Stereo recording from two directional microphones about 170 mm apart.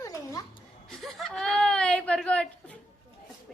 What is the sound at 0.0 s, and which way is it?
Music, 20° left (ahead or behind).